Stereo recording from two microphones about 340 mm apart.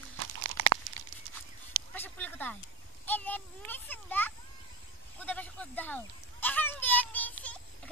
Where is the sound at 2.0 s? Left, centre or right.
Centre.